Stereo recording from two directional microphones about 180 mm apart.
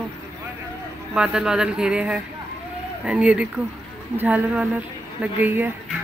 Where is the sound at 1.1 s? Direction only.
5° right (ahead or behind).